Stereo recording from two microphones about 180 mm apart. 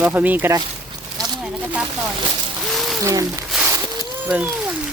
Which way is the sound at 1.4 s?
10° right (ahead or behind).